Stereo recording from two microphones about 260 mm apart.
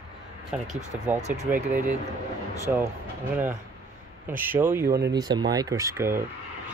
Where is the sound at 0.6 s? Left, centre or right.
Right.